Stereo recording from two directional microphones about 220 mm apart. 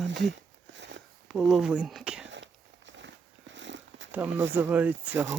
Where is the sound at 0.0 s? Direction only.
55° right (ahead or behind).